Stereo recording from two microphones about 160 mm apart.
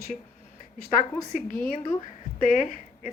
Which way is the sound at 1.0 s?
50° left (ahead or behind).